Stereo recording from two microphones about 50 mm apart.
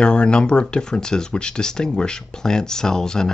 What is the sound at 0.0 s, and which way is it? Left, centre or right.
Speech, centre.